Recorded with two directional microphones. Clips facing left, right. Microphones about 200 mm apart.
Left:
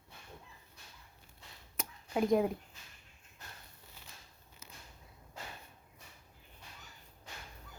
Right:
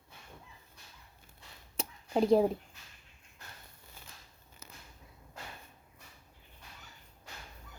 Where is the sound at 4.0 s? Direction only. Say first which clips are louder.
Right 3 dB; 50° right (ahead or behind).